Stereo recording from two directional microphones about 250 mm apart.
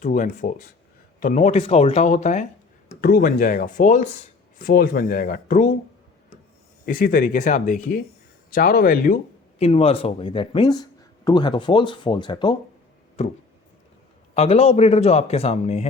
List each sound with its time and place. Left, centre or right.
0.0 s a man's voice: left
6.8 s speech: left
9.6 s a man's voice: left
14.3 s a man's voice: left